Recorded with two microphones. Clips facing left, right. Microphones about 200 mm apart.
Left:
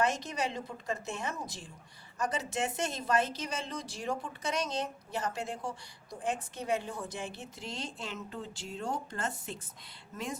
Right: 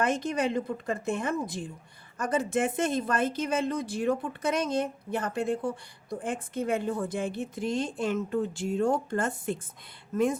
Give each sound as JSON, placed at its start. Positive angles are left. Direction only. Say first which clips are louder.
{"t": 0.0, "sound": "a woman's voice", "louder": "right 5 dB", "side_deg": -55}